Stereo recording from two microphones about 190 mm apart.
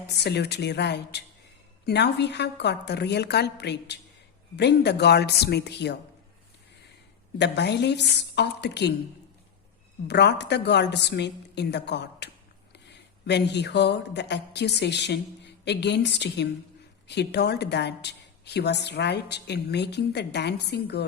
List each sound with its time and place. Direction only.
0.1 s a woman's voice: 60° left (ahead or behind)
7.3 s a woman's voice: 65° left (ahead or behind)
10.1 s a woman's voice: 65° left (ahead or behind)